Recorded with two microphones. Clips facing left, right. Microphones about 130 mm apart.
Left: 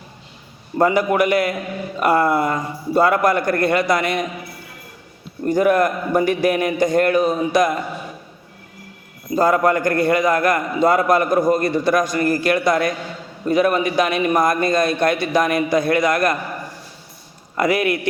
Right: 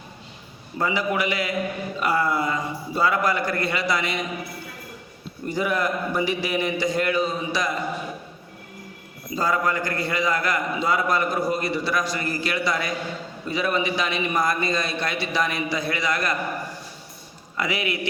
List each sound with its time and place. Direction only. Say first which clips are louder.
0.8 s a man's voice: left 8 dB; 50° left (ahead or behind)
5.5 s a man's voice: left 8 dB; 50° left (ahead or behind)
9.3 s a man's voice: left 8 dB; 50° left (ahead or behind)
17.6 s a man's voice: left 8 dB; 50° left (ahead or behind)